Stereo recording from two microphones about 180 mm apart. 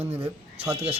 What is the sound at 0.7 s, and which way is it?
Speech, 35° right (ahead or behind).